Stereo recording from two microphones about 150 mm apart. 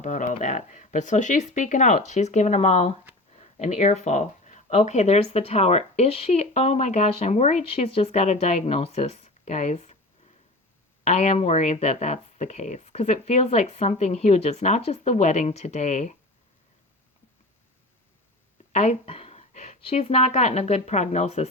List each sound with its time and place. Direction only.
0.0 s speech: 55° left (ahead or behind)
11.0 s speech: 45° left (ahead or behind)
18.7 s speech: 45° left (ahead or behind)